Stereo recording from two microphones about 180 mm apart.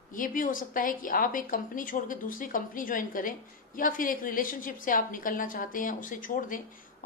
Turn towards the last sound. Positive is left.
turn(degrees=50)  # may be behind; listen again after turning